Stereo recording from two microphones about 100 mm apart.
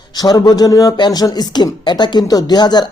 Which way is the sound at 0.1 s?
40° left (ahead or behind).